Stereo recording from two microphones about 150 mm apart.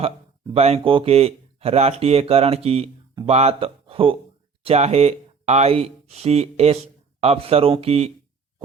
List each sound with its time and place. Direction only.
0.5 s speech: 40° right (ahead or behind)